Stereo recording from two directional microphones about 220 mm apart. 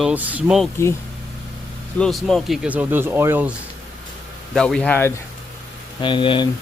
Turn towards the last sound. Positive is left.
turn(degrees=20)  # may be behind; listen again after turning